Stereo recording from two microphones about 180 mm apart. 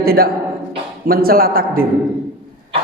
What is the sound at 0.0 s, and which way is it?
A man's voice, 55° right (ahead or behind).